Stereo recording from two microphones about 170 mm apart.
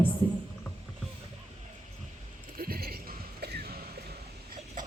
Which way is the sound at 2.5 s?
60° right (ahead or behind).